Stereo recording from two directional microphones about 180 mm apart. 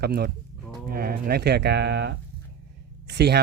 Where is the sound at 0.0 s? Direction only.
65° right (ahead or behind).